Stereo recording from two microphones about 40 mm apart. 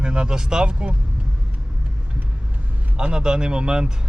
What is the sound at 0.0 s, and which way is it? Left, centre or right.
Speech, right.